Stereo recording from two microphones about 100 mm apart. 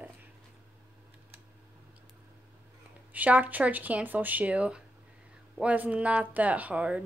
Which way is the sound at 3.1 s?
15° right (ahead or behind).